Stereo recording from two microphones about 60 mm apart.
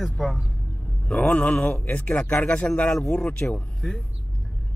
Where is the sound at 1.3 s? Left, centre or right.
Centre.